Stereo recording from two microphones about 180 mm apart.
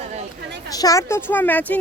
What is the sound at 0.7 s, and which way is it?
Speech, 20° left (ahead or behind).